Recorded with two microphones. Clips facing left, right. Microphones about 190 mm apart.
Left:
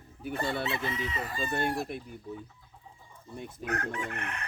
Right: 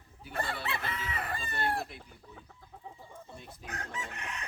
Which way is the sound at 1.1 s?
60° right (ahead or behind).